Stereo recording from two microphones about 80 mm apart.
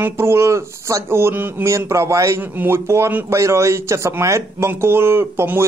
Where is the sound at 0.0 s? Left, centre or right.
Right.